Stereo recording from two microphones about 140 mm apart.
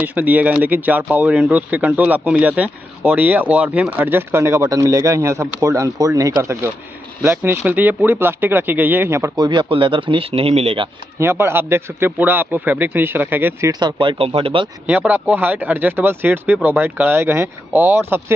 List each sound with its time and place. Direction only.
0.0 s speech: 10° right (ahead or behind)
9.4 s speech: 35° right (ahead or behind)
11.1 s speech: 20° right (ahead or behind)
13.7 s speech: 30° right (ahead or behind)
14.9 s speech: 15° right (ahead or behind)